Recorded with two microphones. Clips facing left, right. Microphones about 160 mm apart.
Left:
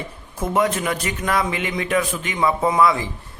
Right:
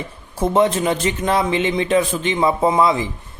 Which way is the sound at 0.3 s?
30° right (ahead or behind).